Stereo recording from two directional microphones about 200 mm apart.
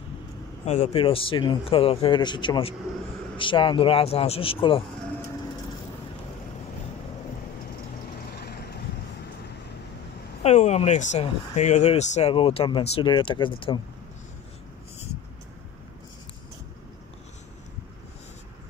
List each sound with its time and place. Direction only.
0.7 s a man's voice: 35° left (ahead or behind)
8.3 s vehicle: 55° left (ahead or behind)
10.4 s a man's voice: 35° left (ahead or behind)